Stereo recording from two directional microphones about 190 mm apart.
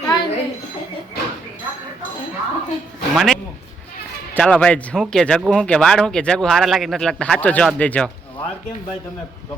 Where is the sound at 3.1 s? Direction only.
Centre (ahead or behind).